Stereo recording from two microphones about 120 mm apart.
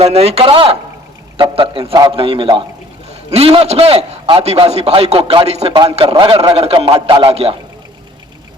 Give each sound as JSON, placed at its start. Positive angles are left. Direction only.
{"t": 0.0, "sound": "a man's voice", "side_deg": -55}
{"t": 3.1, "sound": "a man's voice", "side_deg": -60}
{"t": 6.1, "sound": "a man's voice", "side_deg": -50}